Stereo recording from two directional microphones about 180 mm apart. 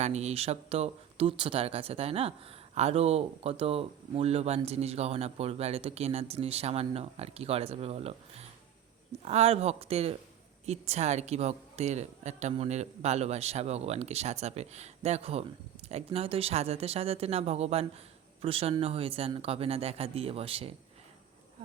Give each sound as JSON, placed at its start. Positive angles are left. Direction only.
{"t": 0.0, "sound": "speech", "side_deg": -40}